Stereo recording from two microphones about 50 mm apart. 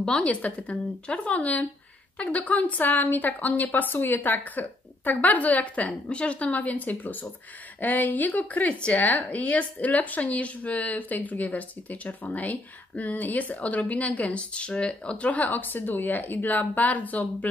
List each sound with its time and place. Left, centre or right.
0.0 s speech: left